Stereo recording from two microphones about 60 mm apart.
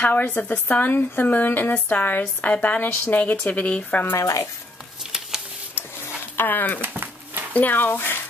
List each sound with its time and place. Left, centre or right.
0.0 s speech: left
4.2 s speech: left
6.3 s speech: left
6.8 s a sound: right
7.5 s speech: left